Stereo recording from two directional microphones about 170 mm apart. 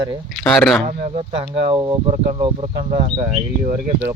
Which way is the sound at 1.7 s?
20° right (ahead or behind).